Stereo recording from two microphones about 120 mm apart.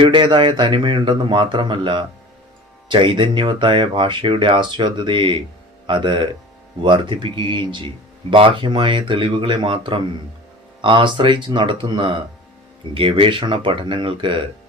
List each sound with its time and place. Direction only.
0.0 s a man's voice: 45° right (ahead or behind)